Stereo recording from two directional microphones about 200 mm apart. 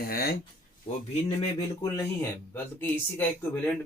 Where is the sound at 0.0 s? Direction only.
50° left (ahead or behind).